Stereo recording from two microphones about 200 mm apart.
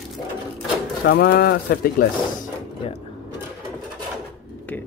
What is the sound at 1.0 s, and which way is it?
Speech, 50° left (ahead or behind).